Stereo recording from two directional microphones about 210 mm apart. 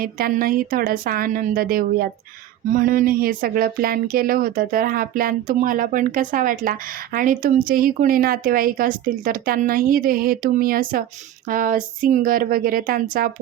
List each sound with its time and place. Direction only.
0.0 s a woman's voice: 40° right (ahead or behind)